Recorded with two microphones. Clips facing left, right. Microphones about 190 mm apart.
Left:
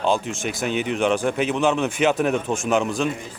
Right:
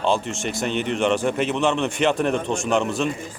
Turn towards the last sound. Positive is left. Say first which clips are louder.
# even
turn(degrees=0)  # may be behind; listen again after turning